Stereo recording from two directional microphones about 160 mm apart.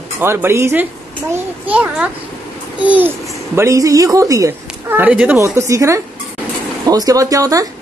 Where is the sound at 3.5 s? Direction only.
20° right (ahead or behind).